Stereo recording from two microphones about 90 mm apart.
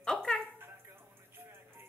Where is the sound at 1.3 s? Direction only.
25° right (ahead or behind).